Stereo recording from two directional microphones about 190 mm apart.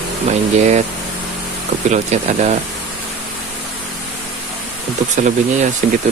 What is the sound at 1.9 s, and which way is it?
Speech, 35° right (ahead or behind).